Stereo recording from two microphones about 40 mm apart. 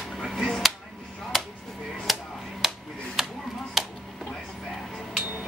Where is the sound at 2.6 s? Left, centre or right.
Centre.